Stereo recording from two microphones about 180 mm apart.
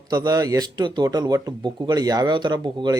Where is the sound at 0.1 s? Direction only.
20° right (ahead or behind).